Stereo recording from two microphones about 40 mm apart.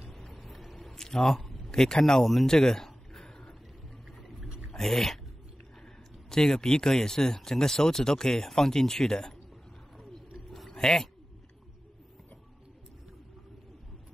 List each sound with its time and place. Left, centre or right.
0.1 s a sound: centre
1.7 s speech: centre
2.4 s a sound: centre
4.6 s speech: centre
6.3 s speech: centre
10.7 s speech: centre